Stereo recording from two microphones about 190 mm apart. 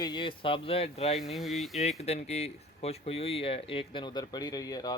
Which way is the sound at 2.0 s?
35° left (ahead or behind).